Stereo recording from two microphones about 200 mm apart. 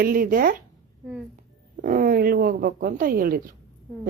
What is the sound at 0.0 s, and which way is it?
Speech, 45° right (ahead or behind).